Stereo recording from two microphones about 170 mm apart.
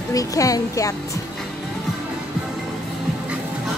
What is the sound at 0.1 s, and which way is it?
Speech, 20° left (ahead or behind).